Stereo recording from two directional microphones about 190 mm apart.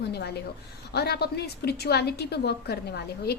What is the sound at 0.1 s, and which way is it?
A woman's voice, 60° left (ahead or behind).